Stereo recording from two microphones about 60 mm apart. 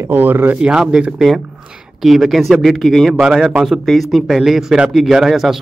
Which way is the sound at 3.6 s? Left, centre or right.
Centre.